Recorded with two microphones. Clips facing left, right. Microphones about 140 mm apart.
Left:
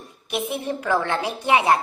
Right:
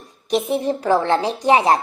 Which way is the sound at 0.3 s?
35° right (ahead or behind).